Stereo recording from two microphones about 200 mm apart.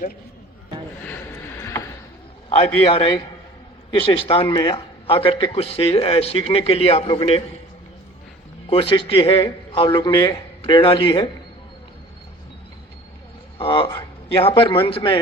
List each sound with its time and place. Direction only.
1.0 s a sound: 10° left (ahead or behind)
2.9 s a man's voice: 20° left (ahead or behind)
8.7 s a man's voice: 25° left (ahead or behind)
13.6 s a man's voice: 25° left (ahead or behind)